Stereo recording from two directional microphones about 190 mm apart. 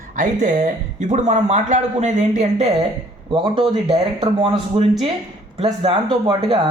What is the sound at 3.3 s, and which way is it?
A man's voice, 25° right (ahead or behind).